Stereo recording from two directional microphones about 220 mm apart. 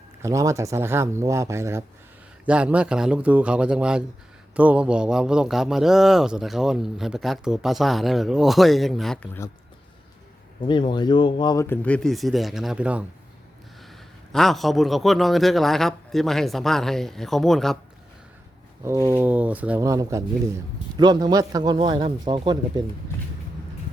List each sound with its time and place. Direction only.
0.2 s a man's voice: 15° right (ahead or behind); by 9.5 s 10° left (ahead or behind)
10.7 s speech: 20° left (ahead or behind); by 13.1 s 5° right (ahead or behind)
14.3 s a man's voice: centre (ahead or behind)
18.9 s speech: 10° right (ahead or behind)